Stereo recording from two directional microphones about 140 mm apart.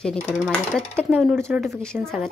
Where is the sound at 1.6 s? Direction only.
5° left (ahead or behind).